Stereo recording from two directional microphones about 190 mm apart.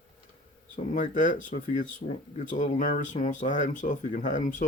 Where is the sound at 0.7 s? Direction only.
40° left (ahead or behind).